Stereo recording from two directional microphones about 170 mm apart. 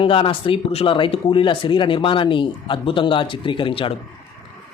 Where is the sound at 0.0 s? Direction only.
30° left (ahead or behind).